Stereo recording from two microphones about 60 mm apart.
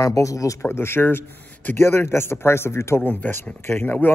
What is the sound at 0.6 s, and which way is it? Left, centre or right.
Speech, left.